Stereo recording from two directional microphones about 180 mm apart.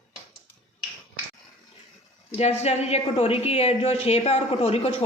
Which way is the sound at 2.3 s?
35° left (ahead or behind).